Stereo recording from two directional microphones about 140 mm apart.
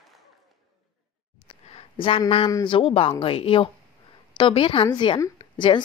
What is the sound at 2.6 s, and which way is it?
A woman's voice, 40° left (ahead or behind).